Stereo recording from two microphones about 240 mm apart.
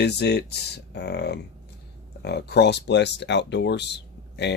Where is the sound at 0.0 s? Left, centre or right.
Left.